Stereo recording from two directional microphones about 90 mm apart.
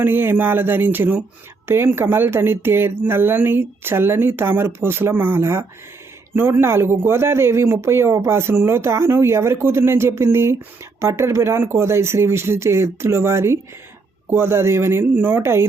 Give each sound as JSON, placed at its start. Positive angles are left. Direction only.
{"t": 0.0, "sound": "a man's voice", "side_deg": -25}